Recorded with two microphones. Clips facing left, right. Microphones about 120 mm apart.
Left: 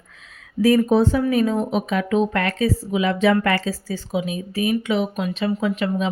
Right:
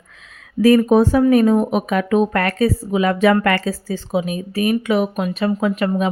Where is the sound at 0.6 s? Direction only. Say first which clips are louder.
Right 4 dB; 85° right.